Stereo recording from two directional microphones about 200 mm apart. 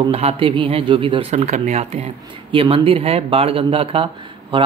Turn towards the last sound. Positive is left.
turn(degrees=-25)  # may be behind; listen again after turning